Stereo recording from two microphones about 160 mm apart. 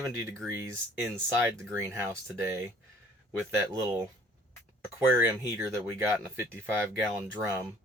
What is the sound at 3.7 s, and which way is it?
Speech, 20° right (ahead or behind).